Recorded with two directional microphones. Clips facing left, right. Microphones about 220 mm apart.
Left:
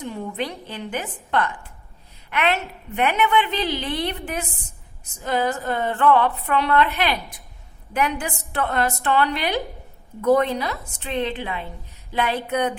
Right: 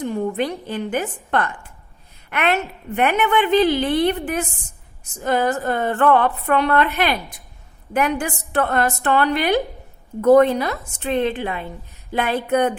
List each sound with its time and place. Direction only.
0.0 s a woman's voice: 50° right (ahead or behind)